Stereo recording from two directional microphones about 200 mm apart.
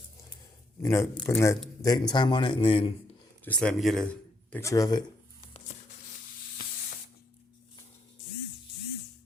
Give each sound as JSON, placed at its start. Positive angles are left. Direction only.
{"t": 0.8, "sound": "a man's voice", "side_deg": 15}
{"t": 3.6, "sound": "a man's voice", "side_deg": 0}
{"t": 5.5, "sound": "a sound", "side_deg": 35}